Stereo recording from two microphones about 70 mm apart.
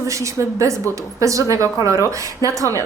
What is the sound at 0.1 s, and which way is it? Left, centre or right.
A woman's voice, right.